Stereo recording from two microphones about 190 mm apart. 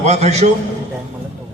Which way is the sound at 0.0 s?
35° right (ahead or behind).